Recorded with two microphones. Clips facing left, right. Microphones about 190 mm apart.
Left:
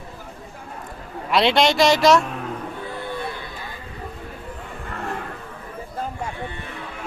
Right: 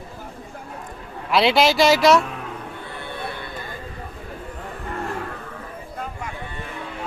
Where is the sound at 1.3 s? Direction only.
Centre (ahead or behind).